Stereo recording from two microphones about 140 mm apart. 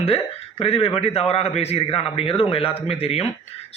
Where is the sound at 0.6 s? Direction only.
40° left (ahead or behind).